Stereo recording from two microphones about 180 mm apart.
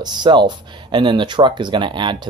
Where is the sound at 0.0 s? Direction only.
25° right (ahead or behind).